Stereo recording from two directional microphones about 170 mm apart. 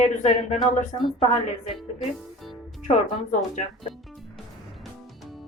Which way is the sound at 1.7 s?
Centre (ahead or behind).